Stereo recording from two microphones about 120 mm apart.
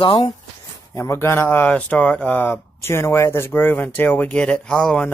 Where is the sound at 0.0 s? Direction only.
45° left (ahead or behind).